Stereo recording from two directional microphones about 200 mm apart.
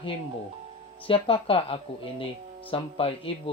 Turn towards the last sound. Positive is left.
turn(degrees=25)  # may be behind; listen again after turning